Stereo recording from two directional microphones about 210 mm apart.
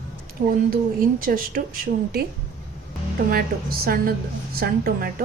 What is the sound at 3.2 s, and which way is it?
Speech, 45° right (ahead or behind).